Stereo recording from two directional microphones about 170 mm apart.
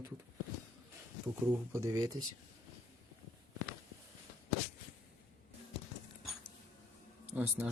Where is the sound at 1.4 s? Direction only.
10° right (ahead or behind).